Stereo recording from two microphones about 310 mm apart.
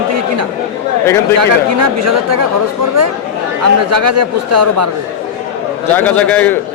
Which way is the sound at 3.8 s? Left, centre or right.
Right.